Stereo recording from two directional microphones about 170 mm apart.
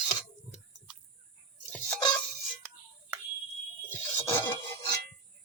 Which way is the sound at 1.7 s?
5° left (ahead or behind).